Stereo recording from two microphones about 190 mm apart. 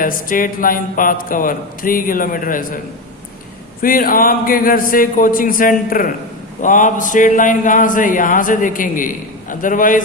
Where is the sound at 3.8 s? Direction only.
50° left (ahead or behind).